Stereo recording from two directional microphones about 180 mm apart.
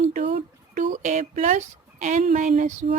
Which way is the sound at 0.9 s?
40° right (ahead or behind).